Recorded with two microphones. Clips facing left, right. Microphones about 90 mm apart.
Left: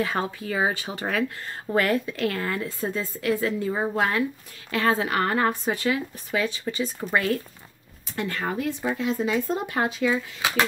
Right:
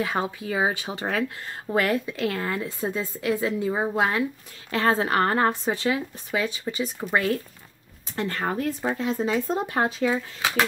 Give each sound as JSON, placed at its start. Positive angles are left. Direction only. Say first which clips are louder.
{"t": 0.0, "sound": "a woman's voice", "louder": "even", "side_deg": -15}
{"t": 4.6, "sound": "a woman's voice", "louder": "right 1 dB", "side_deg": -30}
{"t": 8.2, "sound": "speech", "louder": "right 1 dB", "side_deg": -40}